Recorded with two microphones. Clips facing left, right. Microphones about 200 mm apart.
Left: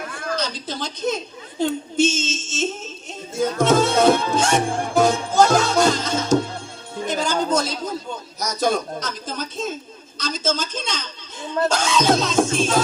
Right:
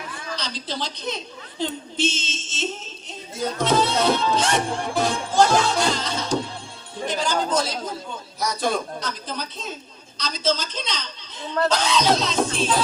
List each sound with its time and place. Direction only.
0.0 s speech: 50° left (ahead or behind)